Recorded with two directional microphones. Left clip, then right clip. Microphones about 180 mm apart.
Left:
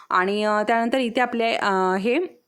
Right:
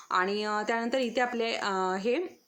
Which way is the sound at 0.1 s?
50° left (ahead or behind).